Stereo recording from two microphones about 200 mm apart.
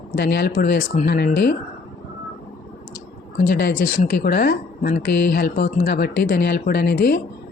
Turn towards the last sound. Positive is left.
turn(degrees=50)  # may be behind; listen again after turning